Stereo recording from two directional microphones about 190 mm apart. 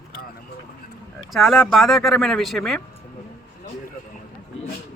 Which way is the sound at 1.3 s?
Centre (ahead or behind).